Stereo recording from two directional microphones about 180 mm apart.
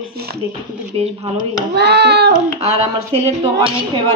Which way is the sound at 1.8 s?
65° right (ahead or behind).